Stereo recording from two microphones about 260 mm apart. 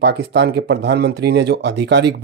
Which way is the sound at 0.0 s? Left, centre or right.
Right.